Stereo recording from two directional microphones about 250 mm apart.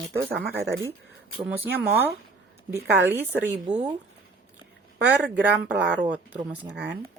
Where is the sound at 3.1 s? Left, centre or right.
Centre.